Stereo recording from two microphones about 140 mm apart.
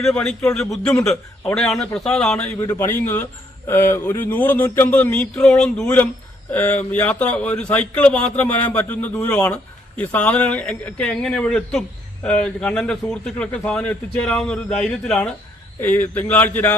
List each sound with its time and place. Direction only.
0.0 s a man's voice: 5° left (ahead or behind)